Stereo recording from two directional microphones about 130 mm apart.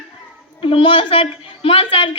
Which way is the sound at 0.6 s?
45° left (ahead or behind).